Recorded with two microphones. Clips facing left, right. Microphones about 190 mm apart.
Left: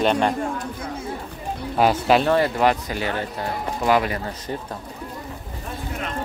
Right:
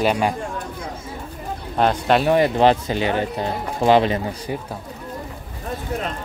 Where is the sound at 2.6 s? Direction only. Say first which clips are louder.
Right 4 dB; 25° right (ahead or behind).